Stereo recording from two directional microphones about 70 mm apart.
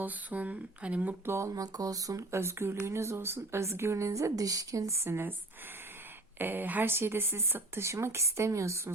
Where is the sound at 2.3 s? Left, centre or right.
Right.